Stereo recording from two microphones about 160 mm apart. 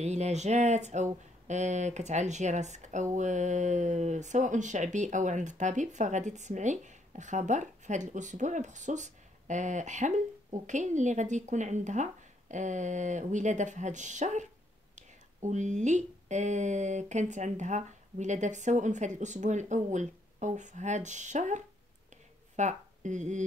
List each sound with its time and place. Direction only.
0.0 s speech: 45° right (ahead or behind)